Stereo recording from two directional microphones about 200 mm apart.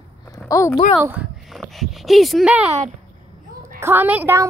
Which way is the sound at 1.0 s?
5° right (ahead or behind).